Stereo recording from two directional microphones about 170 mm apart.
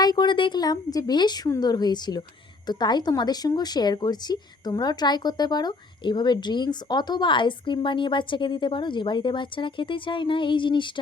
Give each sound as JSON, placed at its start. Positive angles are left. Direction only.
{"t": 0.0, "sound": "a woman's voice", "side_deg": 25}